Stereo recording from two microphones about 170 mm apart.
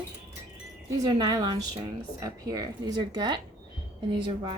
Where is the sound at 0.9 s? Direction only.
20° right (ahead or behind).